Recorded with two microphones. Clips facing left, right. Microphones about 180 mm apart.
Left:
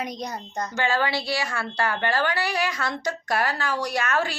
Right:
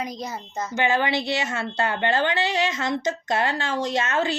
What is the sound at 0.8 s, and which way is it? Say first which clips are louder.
A woman's voice: right 2 dB; 20° right (ahead or behind).